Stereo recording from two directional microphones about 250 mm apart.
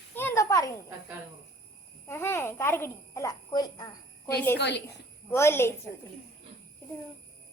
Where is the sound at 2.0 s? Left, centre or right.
Centre.